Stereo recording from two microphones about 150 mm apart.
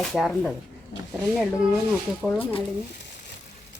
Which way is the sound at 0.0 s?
Centre (ahead or behind).